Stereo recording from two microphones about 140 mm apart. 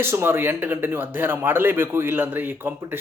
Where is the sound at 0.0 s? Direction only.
15° right (ahead or behind).